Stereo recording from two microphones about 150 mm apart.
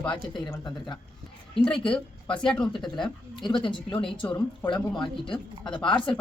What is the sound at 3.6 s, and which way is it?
Speech, 35° left (ahead or behind).